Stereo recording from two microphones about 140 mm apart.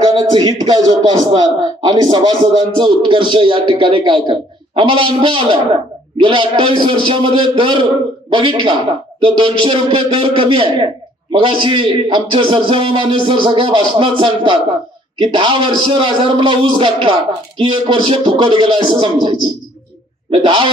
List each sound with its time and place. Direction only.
0.0 s a man's voice: 30° right (ahead or behind)